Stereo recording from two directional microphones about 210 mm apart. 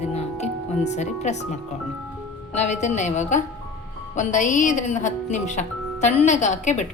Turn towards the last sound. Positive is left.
turn(degrees=35)  # may be behind; listen again after turning